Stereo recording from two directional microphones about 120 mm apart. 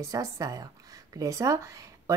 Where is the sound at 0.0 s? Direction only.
25° right (ahead or behind).